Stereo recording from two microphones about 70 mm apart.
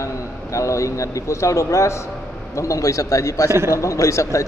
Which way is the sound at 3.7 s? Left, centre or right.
Left.